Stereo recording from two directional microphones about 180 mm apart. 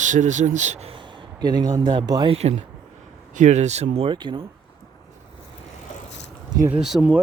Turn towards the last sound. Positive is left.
turn(degrees=-5)  # may be behind; listen again after turning